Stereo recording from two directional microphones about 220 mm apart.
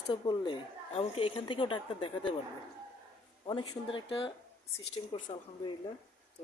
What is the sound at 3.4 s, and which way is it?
A woman's voice, 20° left (ahead or behind).